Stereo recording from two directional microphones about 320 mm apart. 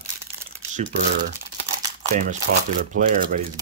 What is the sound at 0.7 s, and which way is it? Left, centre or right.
Typing, right.